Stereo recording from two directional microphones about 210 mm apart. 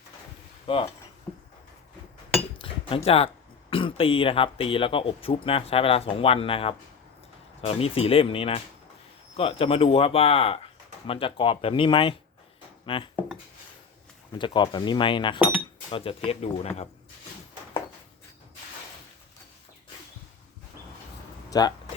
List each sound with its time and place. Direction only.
0.7 s speech: 25° left (ahead or behind)
1.3 s a sound: 20° left (ahead or behind)
2.6 s cutlery: 25° left (ahead or behind)
3.7 s speech: 25° left (ahead or behind)
14.3 s speech: 20° left (ahead or behind)
21.5 s speech: 20° left (ahead or behind)